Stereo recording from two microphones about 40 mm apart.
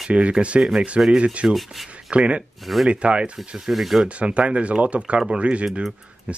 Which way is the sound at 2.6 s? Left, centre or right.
Centre.